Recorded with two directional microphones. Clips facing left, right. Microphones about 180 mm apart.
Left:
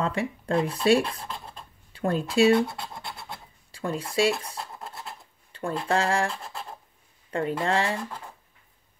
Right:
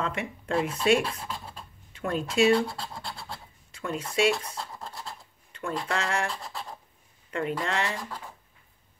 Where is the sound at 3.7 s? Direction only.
30° left (ahead or behind).